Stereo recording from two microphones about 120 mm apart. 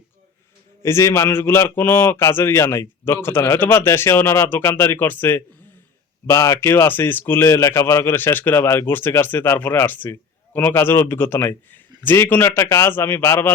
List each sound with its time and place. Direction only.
0.8 s speech: 20° left (ahead or behind)